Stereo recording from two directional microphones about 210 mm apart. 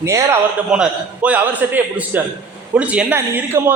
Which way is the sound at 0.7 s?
5° right (ahead or behind).